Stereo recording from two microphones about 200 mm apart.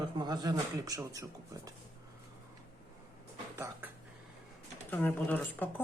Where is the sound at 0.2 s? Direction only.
20° right (ahead or behind).